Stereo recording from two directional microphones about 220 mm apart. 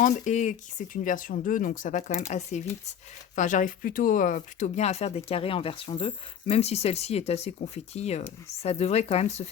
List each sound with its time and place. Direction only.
0.0 s speech: 35° left (ahead or behind)